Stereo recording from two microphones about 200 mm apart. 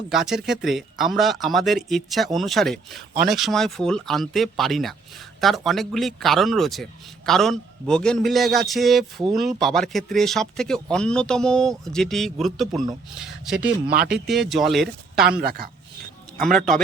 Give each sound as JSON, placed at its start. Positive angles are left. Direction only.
{"t": 0.1, "sound": "speech", "side_deg": 0}
{"t": 15.4, "sound": "speech", "side_deg": -50}
{"t": 16.4, "sound": "speech", "side_deg": 0}